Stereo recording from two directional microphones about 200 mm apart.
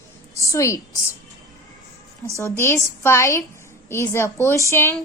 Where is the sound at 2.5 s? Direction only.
10° left (ahead or behind).